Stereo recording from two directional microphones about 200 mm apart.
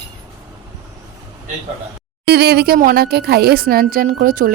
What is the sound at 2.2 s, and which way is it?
A woman's voice, 55° right (ahead or behind).